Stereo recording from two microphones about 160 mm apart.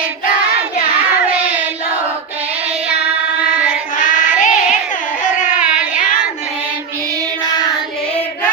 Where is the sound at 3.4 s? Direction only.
10° right (ahead or behind).